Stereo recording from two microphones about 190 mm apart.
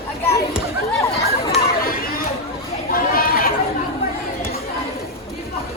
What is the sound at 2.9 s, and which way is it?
Chatter, 50° left (ahead or behind).